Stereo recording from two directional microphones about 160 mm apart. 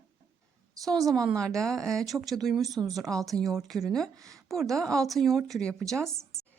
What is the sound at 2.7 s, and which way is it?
Speech, 25° right (ahead or behind).